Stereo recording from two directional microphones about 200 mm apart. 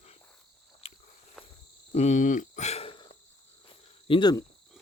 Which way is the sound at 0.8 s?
30° left (ahead or behind).